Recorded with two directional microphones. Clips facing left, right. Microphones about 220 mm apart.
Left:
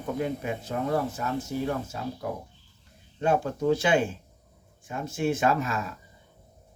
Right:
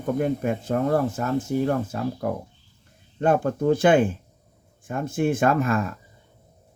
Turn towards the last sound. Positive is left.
turn(degrees=-55)  # may be behind; listen again after turning